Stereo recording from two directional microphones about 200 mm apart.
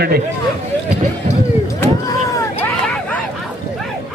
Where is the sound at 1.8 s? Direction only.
15° left (ahead or behind).